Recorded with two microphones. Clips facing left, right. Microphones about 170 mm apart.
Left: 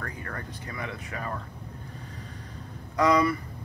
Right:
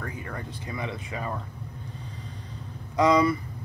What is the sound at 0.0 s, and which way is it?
Speech, 15° right (ahead or behind).